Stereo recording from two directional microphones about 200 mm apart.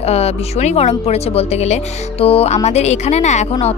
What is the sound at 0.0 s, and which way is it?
A woman's voice, 30° left (ahead or behind).